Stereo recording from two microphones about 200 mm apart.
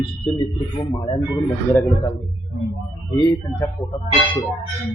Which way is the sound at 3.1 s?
15° left (ahead or behind).